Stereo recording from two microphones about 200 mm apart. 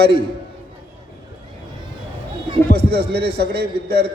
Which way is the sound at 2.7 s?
55° right (ahead or behind).